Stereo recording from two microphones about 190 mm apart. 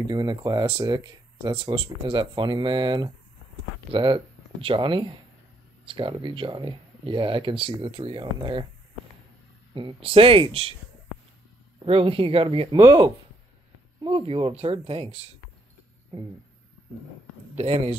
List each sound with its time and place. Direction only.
0.1 s speech: 20° right (ahead or behind)
9.8 s speech: 30° right (ahead or behind)
11.8 s speech: 30° right (ahead or behind)
17.6 s speech: 30° right (ahead or behind)